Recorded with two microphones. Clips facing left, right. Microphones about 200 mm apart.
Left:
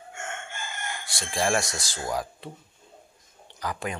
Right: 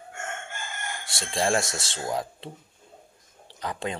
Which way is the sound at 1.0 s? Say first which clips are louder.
Right 1 dB; 25° right (ahead or behind).